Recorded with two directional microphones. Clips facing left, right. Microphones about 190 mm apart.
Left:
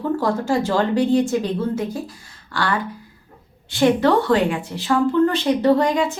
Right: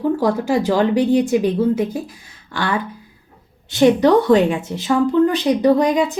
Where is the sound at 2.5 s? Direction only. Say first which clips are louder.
Right 1 dB; 20° right (ahead or behind).